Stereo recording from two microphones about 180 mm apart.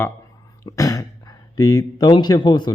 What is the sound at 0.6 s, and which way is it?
Throat clearing, 20° left (ahead or behind).